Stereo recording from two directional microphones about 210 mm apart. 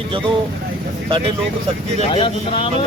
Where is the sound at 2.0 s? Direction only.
25° left (ahead or behind).